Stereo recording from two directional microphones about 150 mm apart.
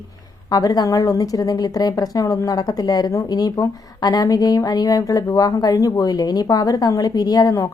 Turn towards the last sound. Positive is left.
turn(degrees=25)  # may be behind; listen again after turning